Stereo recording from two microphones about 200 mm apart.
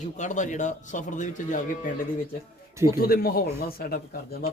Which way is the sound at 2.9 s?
50° left (ahead or behind).